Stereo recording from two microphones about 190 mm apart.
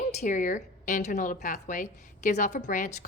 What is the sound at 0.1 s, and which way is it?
A woman's voice, 40° left (ahead or behind).